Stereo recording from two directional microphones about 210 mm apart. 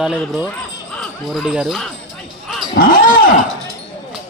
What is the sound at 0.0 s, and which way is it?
Speech, 5° right (ahead or behind).